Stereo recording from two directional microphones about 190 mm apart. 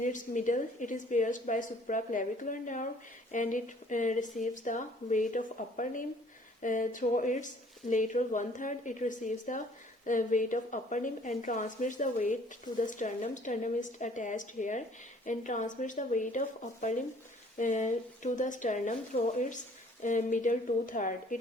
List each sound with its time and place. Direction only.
0.0 s a woman's voice: 40° left (ahead or behind)
17.6 s a woman's voice: 40° left (ahead or behind)
20.0 s a woman's voice: 40° left (ahead or behind)